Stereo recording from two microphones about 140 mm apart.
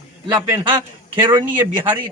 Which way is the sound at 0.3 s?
35° right (ahead or behind).